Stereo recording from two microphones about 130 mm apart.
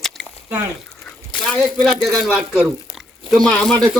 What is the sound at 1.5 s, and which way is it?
A man's voice, centre (ahead or behind).